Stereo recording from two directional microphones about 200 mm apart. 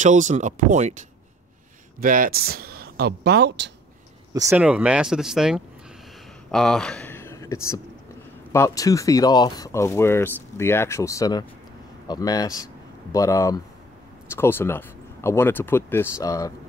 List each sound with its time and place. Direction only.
0.0 s speech: 40° right (ahead or behind)
2.0 s speech: 45° right (ahead or behind)
4.5 s speech: 5° right (ahead or behind); by 16.5 s 15° left (ahead or behind)